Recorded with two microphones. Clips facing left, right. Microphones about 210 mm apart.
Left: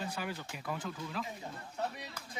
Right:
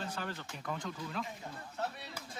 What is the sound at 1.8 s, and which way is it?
Speech, 15° left (ahead or behind).